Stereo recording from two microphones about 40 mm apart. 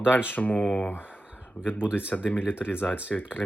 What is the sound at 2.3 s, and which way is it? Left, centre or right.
Speech, left.